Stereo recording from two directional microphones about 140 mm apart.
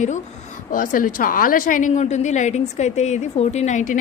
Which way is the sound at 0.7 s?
70° left (ahead or behind).